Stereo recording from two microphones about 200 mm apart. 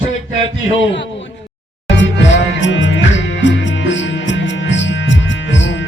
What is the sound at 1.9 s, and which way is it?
Music, 65° left (ahead or behind).